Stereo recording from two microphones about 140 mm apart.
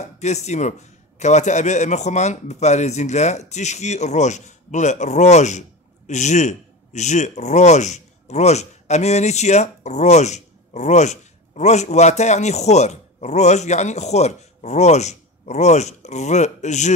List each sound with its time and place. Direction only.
0.0 s a man's voice: 55° left (ahead or behind)